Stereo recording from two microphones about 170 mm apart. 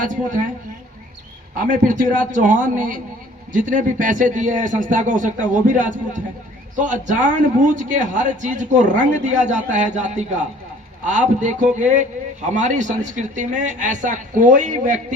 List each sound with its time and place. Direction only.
0.0 s speech: 50° right (ahead or behind)
1.5 s speech: 50° right (ahead or behind)